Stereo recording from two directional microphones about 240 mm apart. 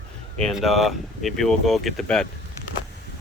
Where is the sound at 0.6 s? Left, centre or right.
Centre.